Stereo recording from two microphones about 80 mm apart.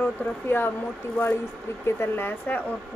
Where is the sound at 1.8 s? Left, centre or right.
Left.